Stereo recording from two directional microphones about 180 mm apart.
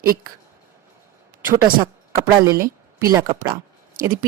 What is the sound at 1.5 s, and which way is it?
Speech, 55° right (ahead or behind).